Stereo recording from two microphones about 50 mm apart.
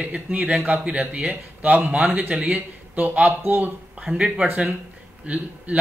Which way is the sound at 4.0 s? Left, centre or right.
Right.